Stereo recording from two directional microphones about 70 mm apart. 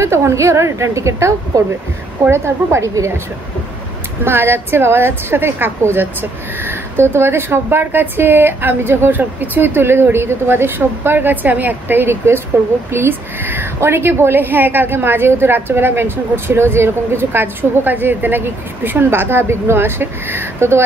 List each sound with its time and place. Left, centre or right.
0.0 s a woman's voice: right
4.2 s a woman's voice: right